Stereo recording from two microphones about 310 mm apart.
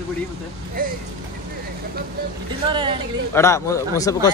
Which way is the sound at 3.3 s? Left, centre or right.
Centre.